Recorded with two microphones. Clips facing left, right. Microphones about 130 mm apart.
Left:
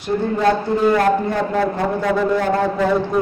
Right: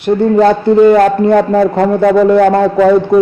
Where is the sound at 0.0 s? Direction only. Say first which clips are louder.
Right 9 dB; 65° right (ahead or behind).